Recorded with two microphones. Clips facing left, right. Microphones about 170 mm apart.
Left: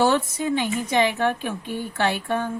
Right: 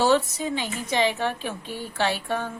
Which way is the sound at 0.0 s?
55° left (ahead or behind).